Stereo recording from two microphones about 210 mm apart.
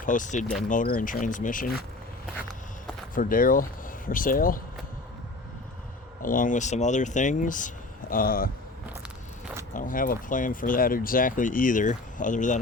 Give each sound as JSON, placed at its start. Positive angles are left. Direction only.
{"t": 0.0, "sound": "speech", "side_deg": 40}
{"t": 3.2, "sound": "speech", "side_deg": 40}
{"t": 6.2, "sound": "speech", "side_deg": 40}
{"t": 9.7, "sound": "speech", "side_deg": 40}